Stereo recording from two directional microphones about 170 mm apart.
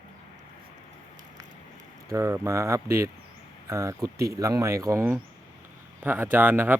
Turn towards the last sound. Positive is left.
turn(degrees=-10)  # may be behind; listen again after turning